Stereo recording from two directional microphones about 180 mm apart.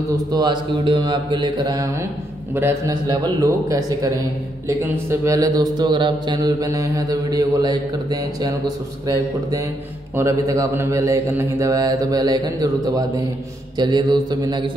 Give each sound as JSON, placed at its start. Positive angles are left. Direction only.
{"t": 0.1, "sound": "a man's voice", "side_deg": -20}